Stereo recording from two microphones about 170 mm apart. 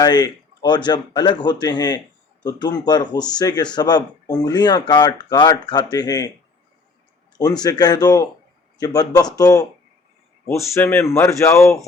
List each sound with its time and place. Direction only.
0.0 s speech: 25° left (ahead or behind)
7.3 s speech: 25° left (ahead or behind)